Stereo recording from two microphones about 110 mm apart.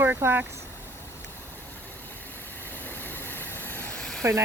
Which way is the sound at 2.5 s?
20° left (ahead or behind).